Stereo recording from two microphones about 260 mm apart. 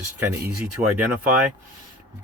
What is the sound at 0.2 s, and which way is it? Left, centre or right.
Speech, centre.